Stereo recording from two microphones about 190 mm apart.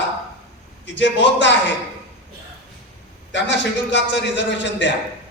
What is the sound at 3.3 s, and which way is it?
A man's voice, 70° left (ahead or behind).